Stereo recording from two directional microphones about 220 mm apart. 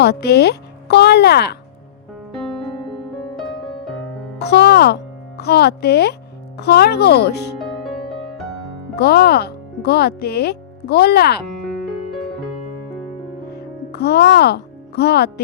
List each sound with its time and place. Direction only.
0.0 s speech: 50° left (ahead or behind)
4.4 s speech: 50° left (ahead or behind)
7.6 s music: centre (ahead or behind)
9.0 s speech: 45° left (ahead or behind)
13.5 s music: 50° left (ahead or behind)